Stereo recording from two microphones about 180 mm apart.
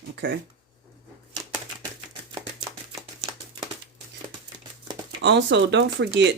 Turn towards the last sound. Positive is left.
turn(degrees=-75)  # may be behind; listen again after turning